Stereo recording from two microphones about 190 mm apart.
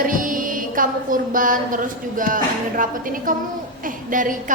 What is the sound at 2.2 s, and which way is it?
A woman's voice, 45° right (ahead or behind).